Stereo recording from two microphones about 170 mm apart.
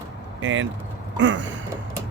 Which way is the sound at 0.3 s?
90° right.